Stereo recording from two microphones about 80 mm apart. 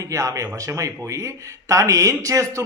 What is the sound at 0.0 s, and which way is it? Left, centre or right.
Speech, right.